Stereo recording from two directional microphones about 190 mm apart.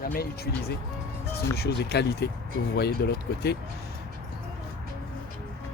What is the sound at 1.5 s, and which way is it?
Speech, 55° left (ahead or behind).